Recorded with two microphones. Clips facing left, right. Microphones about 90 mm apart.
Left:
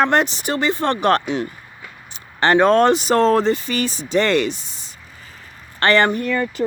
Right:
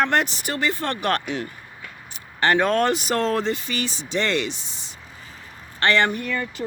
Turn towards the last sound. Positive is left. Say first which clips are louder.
# left 6 dB
turn(degrees=45)  # may be behind; listen again after turning